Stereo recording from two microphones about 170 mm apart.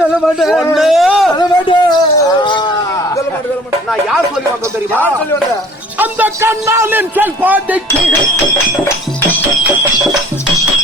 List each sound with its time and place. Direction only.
0.3 s speech: centre (ahead or behind)
1.3 s a sound: 25° left (ahead or behind)
6.0 s a man's voice: 10° right (ahead or behind)